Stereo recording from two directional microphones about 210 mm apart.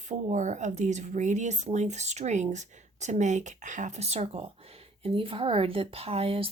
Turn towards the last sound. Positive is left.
turn(degrees=-25)  # may be behind; listen again after turning